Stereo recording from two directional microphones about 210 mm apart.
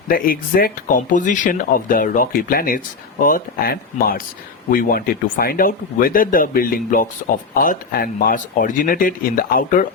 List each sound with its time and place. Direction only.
0.1 s speech: 45° left (ahead or behind)